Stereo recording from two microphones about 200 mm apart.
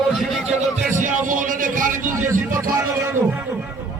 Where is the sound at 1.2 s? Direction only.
40° right (ahead or behind).